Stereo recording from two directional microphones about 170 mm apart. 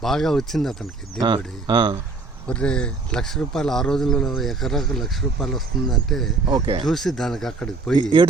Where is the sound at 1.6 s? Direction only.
30° right (ahead or behind).